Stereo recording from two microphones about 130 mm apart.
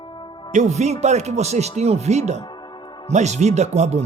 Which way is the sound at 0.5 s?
60° right (ahead or behind).